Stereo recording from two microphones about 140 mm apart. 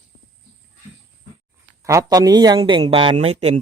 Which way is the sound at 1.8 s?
25° right (ahead or behind).